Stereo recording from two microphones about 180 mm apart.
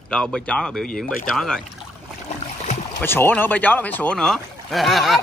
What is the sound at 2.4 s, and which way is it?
Boat, 40° left (ahead or behind).